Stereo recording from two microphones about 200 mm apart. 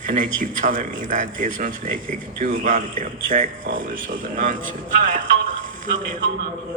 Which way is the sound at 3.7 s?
70° right (ahead or behind).